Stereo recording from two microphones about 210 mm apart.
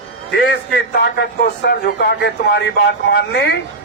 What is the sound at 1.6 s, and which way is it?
Speech, 50° left (ahead or behind).